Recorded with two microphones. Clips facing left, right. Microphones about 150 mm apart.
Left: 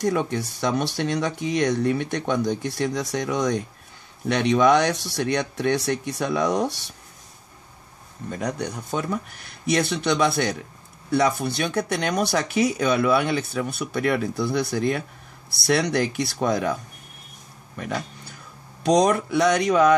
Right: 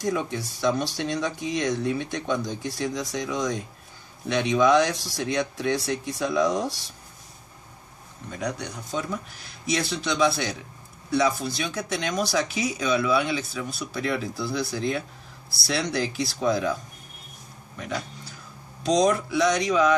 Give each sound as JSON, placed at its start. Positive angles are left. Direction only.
{"t": 0.0, "sound": "speech", "side_deg": 60}
{"t": 8.3, "sound": "speech", "side_deg": 50}
{"t": 17.7, "sound": "speech", "side_deg": 55}